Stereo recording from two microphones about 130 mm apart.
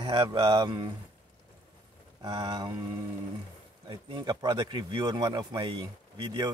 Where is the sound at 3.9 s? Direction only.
35° right (ahead or behind).